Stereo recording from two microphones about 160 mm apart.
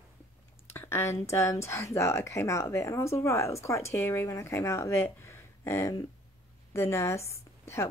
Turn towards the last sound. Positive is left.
turn(degrees=15)  # may be behind; listen again after turning